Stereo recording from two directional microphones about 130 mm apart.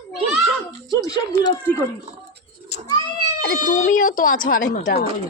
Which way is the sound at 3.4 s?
85° left.